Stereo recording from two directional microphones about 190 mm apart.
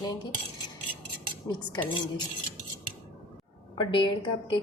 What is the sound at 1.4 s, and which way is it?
Speech, 20° left (ahead or behind).